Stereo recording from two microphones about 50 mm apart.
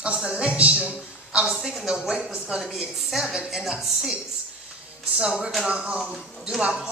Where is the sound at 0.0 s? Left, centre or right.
Centre.